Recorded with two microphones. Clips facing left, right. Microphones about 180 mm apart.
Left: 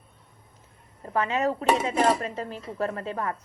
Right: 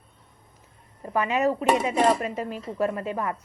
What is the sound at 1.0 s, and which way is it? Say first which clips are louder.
Speech: right 2 dB; 10° right (ahead or behind).